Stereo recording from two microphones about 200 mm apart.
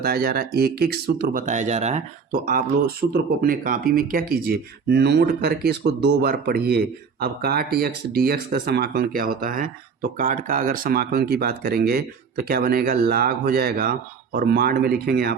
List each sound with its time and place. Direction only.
0.0 s speech: 50° right (ahead or behind)